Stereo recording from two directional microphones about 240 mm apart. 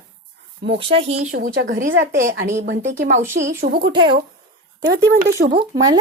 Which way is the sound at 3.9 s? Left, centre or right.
Centre.